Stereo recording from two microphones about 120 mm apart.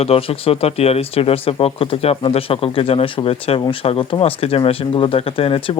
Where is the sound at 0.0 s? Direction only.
55° left (ahead or behind).